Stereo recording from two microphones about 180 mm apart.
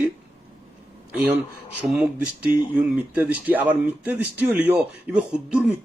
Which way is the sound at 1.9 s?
10° right (ahead or behind).